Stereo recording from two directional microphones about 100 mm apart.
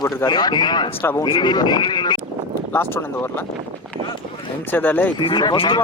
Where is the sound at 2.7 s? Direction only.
25° left (ahead or behind).